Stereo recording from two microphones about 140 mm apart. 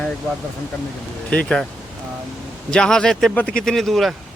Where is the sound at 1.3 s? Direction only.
5° left (ahead or behind).